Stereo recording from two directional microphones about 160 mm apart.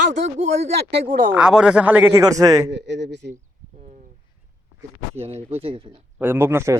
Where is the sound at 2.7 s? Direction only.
90° right.